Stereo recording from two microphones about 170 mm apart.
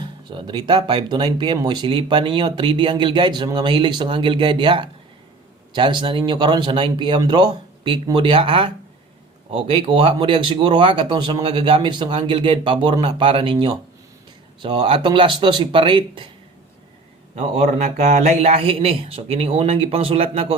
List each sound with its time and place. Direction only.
0.3 s speech: 30° right (ahead or behind)
17.3 s a man's voice: 45° right (ahead or behind)